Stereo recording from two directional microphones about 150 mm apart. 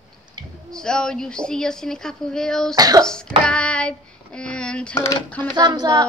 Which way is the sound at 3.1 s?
5° left (ahead or behind).